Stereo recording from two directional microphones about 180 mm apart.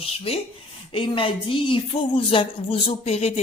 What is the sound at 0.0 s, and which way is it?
A woman's voice, 30° left (ahead or behind).